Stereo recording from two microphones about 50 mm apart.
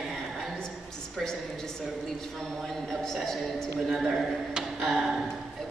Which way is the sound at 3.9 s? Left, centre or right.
Centre.